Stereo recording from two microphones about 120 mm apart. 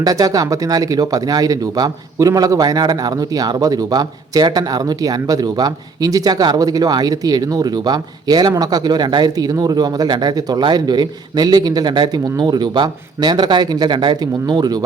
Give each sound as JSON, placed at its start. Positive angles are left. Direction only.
{"t": 0.0, "sound": "speech", "side_deg": -30}